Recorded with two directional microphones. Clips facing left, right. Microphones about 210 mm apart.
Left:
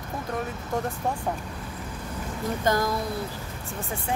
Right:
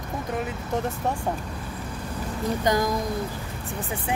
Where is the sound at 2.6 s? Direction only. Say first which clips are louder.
Right 1 dB; 15° right (ahead or behind).